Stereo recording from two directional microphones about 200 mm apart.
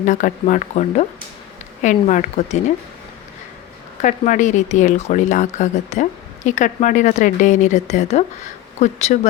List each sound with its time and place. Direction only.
0.0 s speech: 40° left (ahead or behind)
4.0 s speech: 40° left (ahead or behind)